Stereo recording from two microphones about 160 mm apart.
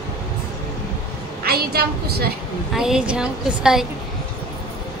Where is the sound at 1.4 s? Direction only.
75° right (ahead or behind).